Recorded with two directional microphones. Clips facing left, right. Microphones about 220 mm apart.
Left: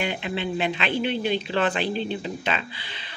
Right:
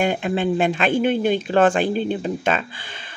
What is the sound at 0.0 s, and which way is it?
Speech, 45° right (ahead or behind).